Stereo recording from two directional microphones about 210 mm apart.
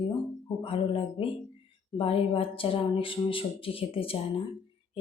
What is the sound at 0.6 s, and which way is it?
A woman's voice, 25° left (ahead or behind).